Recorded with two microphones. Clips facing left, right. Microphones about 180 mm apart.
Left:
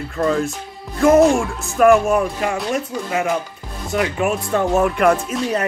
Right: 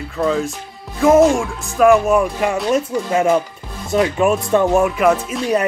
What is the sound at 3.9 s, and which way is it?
Speech, 25° right (ahead or behind).